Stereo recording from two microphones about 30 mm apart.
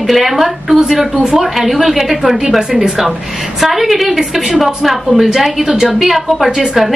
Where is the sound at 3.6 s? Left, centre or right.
Centre.